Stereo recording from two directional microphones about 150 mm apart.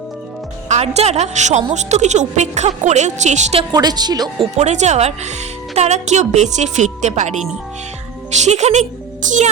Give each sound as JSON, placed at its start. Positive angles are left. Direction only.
{"t": 0.7, "sound": "a woman's voice", "side_deg": -45}
{"t": 3.6, "sound": "a woman's voice", "side_deg": -25}
{"t": 4.5, "sound": "a woman's voice", "side_deg": -50}
{"t": 8.4, "sound": "speech", "side_deg": -50}